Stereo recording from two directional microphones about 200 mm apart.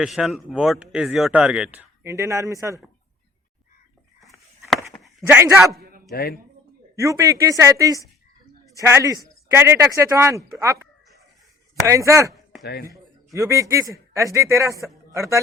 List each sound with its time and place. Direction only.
0.0 s speech: centre (ahead or behind)
5.2 s speech: 15° right (ahead or behind)
6.1 s speech: 50° left (ahead or behind)
6.9 s speech: 15° right (ahead or behind)
11.9 s speech: 15° right (ahead or behind)
12.6 s speech: 50° left (ahead or behind)
12.9 s a man's voice: 15° right (ahead or behind)